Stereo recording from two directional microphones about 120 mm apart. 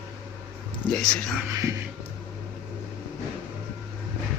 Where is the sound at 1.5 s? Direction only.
25° right (ahead or behind).